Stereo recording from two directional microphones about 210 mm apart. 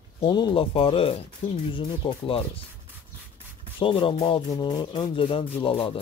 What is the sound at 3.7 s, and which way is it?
Speech, 25° left (ahead or behind).